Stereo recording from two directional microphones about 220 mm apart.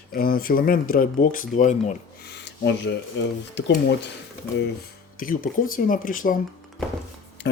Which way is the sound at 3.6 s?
55° left (ahead or behind).